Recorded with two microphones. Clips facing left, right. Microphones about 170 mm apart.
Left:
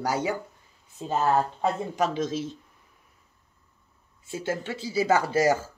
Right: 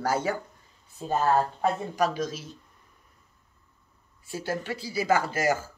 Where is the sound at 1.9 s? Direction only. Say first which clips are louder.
Left 1 dB; 25° left (ahead or behind).